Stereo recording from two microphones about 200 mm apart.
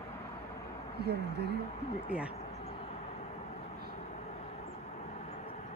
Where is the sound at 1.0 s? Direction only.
55° right (ahead or behind).